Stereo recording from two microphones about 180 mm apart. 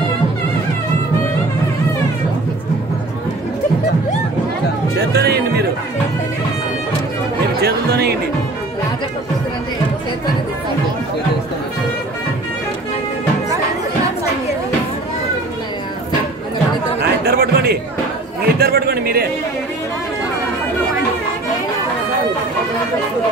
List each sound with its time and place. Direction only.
5.1 s music: 65° right (ahead or behind)
7.6 s music: 65° right (ahead or behind)
17.0 s chatter: 60° right (ahead or behind)
18.6 s a man's voice: 60° right (ahead or behind)